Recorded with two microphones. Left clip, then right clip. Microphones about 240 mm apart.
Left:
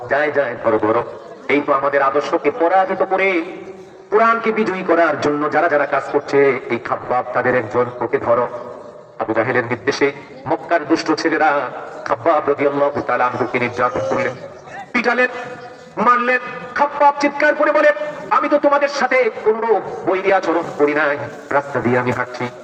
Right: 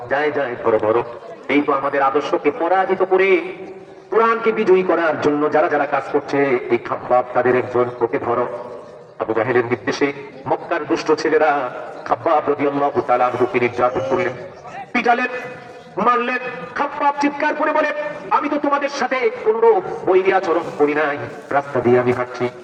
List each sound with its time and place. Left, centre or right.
0.1 s a man's voice: left
9.3 s a man's voice: left
14.9 s a man's voice: left